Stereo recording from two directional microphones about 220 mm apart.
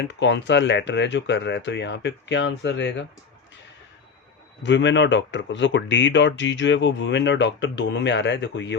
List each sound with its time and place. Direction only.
0.0 s speech: 55° left (ahead or behind)
4.6 s speech: 55° left (ahead or behind)